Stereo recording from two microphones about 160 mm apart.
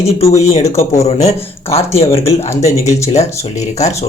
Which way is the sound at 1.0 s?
40° left (ahead or behind).